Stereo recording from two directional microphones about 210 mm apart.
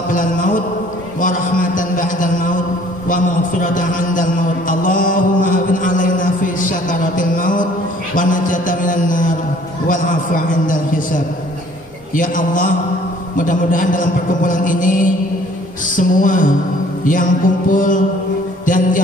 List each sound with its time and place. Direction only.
0.1 s a man's voice: 40° left (ahead or behind)
1.2 s a sound: 40° left (ahead or behind)
8.1 s mantra: 40° left (ahead or behind)
9.8 s a man's voice: 40° left (ahead or behind)
18.7 s music: 40° left (ahead or behind)